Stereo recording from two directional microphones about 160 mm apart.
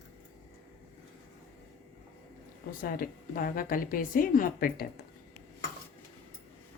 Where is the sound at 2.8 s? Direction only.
65° left (ahead or behind).